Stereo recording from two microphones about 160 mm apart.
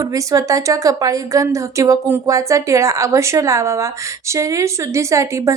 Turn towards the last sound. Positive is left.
turn(degrees=-20)  # may be behind; listen again after turning